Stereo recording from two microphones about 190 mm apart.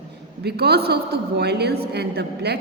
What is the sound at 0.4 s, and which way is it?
A woman's voice, 60° right (ahead or behind).